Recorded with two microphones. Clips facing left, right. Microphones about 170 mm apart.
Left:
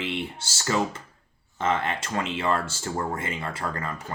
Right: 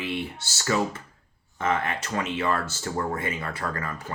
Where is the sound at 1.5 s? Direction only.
25° left (ahead or behind).